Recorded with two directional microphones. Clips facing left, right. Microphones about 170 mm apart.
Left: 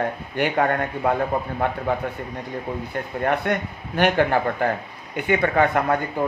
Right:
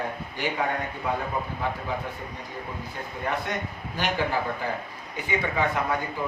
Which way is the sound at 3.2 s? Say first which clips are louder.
Left 7 dB; 60° left (ahead or behind).